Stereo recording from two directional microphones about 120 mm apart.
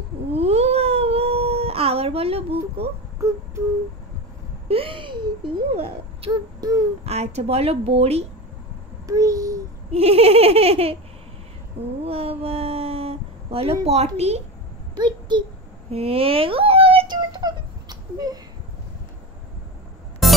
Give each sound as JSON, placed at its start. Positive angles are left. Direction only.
{"t": 0.3, "sound": "cat", "side_deg": -60}
{"t": 4.6, "sound": "a sound", "side_deg": -50}
{"t": 7.1, "sound": "a woman's voice", "side_deg": -60}
{"t": 9.0, "sound": "a child's voice", "side_deg": -30}
{"t": 9.8, "sound": "a woman's voice", "side_deg": -55}
{"t": 12.0, "sound": "a sound", "side_deg": -55}
{"t": 13.8, "sound": "a woman's voice", "side_deg": -60}
{"t": 15.0, "sound": "a child's voice", "side_deg": -40}
{"t": 15.9, "sound": "speech", "side_deg": -55}
{"t": 17.1, "sound": "a sound", "side_deg": -35}
{"t": 20.2, "sound": "music", "side_deg": 0}